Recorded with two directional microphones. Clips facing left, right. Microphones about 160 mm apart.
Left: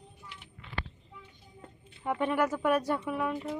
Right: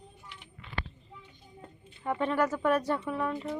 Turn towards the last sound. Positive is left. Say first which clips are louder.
# even
turn(degrees=10)  # may be behind; listen again after turning